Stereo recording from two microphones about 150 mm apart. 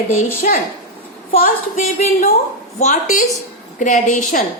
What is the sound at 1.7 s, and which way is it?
A woman's voice, 55° left (ahead or behind).